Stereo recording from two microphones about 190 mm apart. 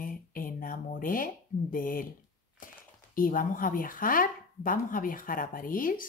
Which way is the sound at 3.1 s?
45° left (ahead or behind).